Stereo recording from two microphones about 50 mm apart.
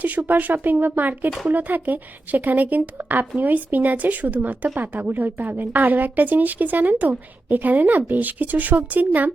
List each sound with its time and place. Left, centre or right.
0.0 s speech: right